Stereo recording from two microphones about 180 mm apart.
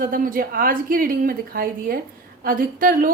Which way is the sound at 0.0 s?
50° right (ahead or behind).